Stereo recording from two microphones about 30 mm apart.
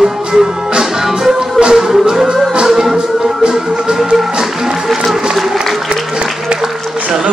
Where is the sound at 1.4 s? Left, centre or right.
Right.